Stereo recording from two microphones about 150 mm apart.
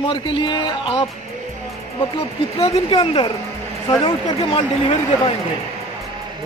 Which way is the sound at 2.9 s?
30° left (ahead or behind).